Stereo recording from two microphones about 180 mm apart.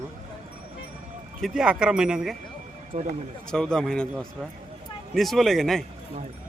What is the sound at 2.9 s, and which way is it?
Speech, 40° right (ahead or behind).